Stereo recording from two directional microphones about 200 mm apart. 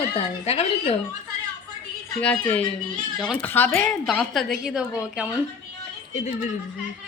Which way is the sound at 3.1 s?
Centre (ahead or behind).